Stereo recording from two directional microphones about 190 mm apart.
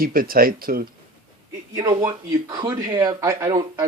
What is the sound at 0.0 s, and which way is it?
Speech, 50° right (ahead or behind).